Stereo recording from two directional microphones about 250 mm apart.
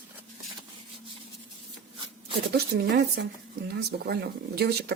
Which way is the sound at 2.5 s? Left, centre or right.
Right.